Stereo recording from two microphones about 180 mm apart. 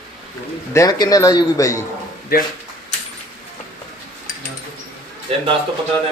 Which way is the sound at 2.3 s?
55° left (ahead or behind).